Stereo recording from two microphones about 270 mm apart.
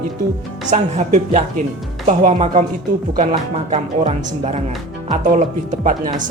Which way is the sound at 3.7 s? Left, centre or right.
Right.